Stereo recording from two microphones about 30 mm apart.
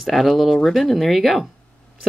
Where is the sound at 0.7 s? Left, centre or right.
Centre.